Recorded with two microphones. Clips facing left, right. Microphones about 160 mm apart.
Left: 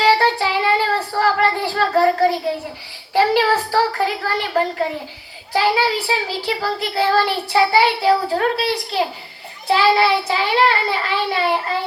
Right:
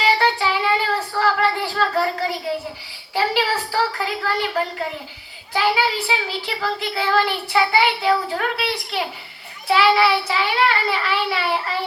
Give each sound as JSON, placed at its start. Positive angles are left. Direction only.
{"t": 0.0, "sound": "child singing", "side_deg": 40}
{"t": 3.2, "sound": "a child's voice", "side_deg": 45}